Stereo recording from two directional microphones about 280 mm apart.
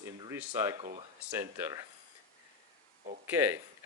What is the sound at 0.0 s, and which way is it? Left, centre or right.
Speech, centre.